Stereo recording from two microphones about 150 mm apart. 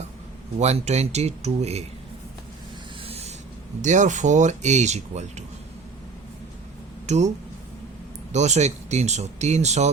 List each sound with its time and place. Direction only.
0.6 s speech: 45° right (ahead or behind)
3.0 s a sound: 40° right (ahead or behind)
3.8 s speech: 55° right (ahead or behind)
7.1 s speech: 50° right (ahead or behind)
8.3 s speech: 50° right (ahead or behind)